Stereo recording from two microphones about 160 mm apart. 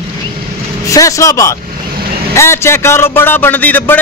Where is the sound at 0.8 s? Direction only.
20° left (ahead or behind).